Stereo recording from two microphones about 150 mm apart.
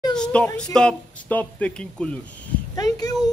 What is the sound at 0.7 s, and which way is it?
Speech, 10° left (ahead or behind).